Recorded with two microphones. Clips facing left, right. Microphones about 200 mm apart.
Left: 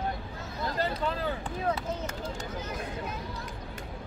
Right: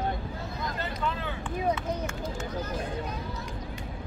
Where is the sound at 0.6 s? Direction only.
35° left (ahead or behind).